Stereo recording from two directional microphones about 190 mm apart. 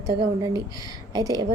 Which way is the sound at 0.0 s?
20° right (ahead or behind).